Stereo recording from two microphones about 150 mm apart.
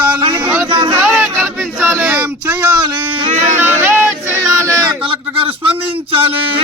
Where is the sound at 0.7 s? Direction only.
35° right (ahead or behind).